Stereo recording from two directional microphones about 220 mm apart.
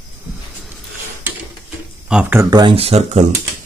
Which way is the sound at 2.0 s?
5° right (ahead or behind).